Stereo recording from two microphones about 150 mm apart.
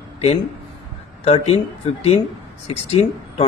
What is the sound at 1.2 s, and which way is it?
Speech, 40° left (ahead or behind).